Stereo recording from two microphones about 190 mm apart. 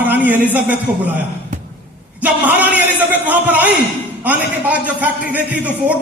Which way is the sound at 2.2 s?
10° right (ahead or behind).